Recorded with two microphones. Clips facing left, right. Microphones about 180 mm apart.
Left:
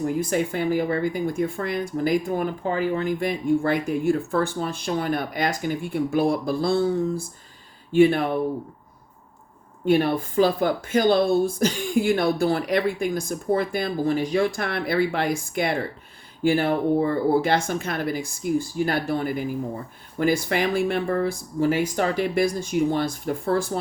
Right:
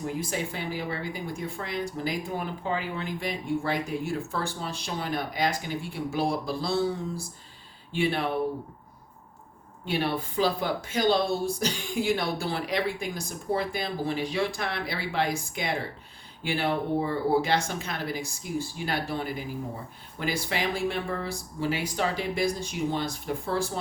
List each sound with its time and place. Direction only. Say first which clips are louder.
0.0 s speech: left 8 dB; 50° left (ahead or behind)
9.8 s speech: left 8 dB; 50° left (ahead or behind)